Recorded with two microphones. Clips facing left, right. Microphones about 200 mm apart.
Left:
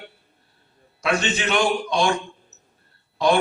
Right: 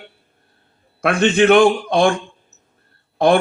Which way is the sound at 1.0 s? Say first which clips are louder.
Right 9 dB; 55° right (ahead or behind).